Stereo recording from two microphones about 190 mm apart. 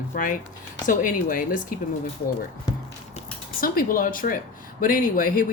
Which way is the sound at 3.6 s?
50° left (ahead or behind).